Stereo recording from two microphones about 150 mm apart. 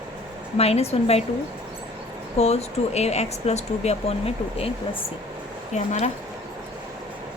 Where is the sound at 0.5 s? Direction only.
45° left (ahead or behind).